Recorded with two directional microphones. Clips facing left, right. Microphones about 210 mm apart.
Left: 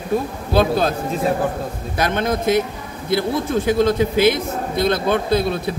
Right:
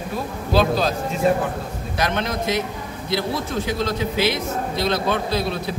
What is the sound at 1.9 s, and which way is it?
A man's voice, 50° left (ahead or behind).